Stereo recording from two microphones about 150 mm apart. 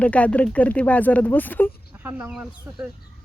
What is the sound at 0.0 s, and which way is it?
Speech, 10° left (ahead or behind).